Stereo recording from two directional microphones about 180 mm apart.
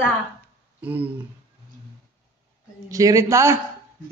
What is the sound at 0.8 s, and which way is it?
Speech, 10° right (ahead or behind).